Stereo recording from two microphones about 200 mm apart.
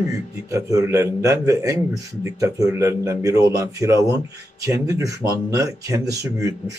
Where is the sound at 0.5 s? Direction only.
15° right (ahead or behind).